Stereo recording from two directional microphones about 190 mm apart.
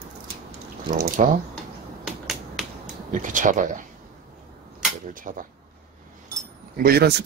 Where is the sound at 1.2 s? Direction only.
35° right (ahead or behind).